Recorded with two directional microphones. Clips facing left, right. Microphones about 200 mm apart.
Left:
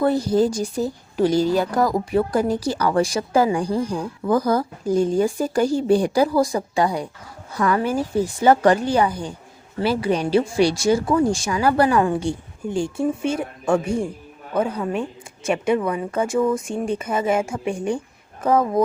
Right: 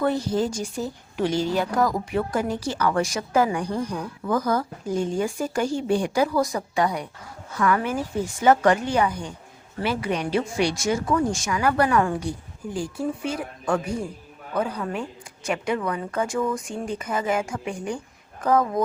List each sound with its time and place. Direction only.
0.0 s a woman's voice: 35° left (ahead or behind)